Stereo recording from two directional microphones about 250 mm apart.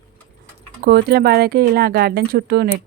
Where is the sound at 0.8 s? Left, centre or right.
Right.